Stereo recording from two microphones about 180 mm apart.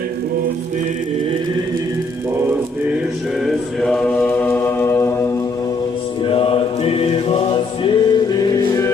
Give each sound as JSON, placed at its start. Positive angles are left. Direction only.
{"t": 3.4, "sound": "mantra", "side_deg": 0}
{"t": 6.2, "sound": "choir", "side_deg": 30}